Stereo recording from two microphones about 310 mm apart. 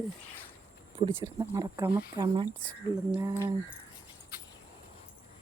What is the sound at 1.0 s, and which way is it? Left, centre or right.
Speech, centre.